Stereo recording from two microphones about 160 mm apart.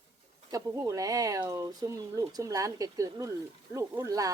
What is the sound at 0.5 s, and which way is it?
Speech, 20° right (ahead or behind).